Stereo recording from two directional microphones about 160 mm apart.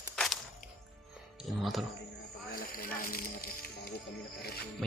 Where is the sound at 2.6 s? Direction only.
65° left (ahead or behind).